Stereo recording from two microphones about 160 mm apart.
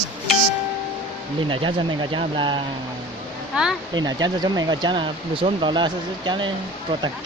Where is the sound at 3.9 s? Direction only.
25° right (ahead or behind).